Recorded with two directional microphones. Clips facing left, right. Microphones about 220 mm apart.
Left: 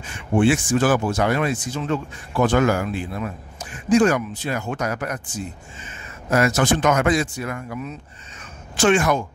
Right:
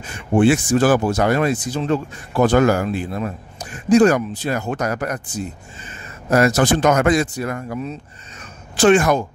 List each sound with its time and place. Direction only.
0.0 s speech: 40° right (ahead or behind)